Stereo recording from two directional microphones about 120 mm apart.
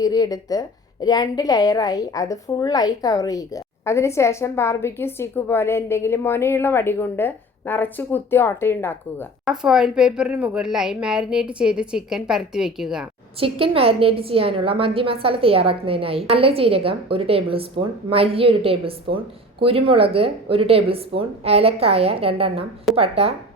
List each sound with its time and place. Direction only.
0.0 s a woman's voice: 30° left (ahead or behind)
9.5 s a woman's voice: 5° right (ahead or behind)
13.4 s a woman's voice: 50° right (ahead or behind)